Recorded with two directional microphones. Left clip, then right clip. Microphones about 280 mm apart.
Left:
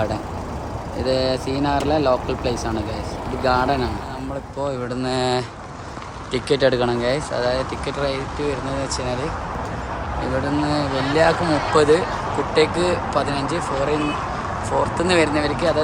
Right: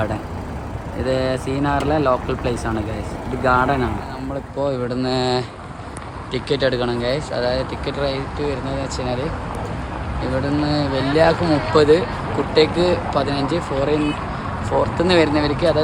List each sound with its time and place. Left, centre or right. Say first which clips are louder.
1.0 s speech: even; centre
10.4 s speech: right 2 dB; centre